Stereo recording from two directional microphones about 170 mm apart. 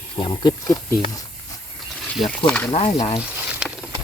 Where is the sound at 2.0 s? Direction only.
Centre (ahead or behind).